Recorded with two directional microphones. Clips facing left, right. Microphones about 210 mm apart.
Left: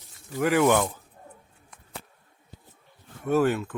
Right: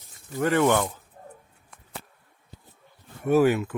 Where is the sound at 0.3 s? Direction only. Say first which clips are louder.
Even; 5° left (ahead or behind).